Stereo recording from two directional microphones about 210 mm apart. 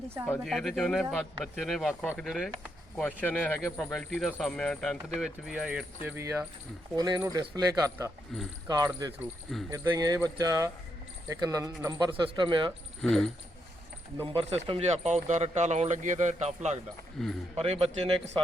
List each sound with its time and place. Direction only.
0.3 s speech: centre (ahead or behind); by 8.1 s 15° right (ahead or behind)
8.3 s speech: centre (ahead or behind)
8.6 s speech: 15° right (ahead or behind)
13.0 s speech: centre (ahead or behind)
14.3 s speech: 25° right (ahead or behind)
17.2 s speech: centre (ahead or behind)
17.6 s speech: 30° right (ahead or behind)